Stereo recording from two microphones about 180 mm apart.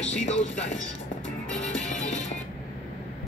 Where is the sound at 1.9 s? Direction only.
40° left (ahead or behind).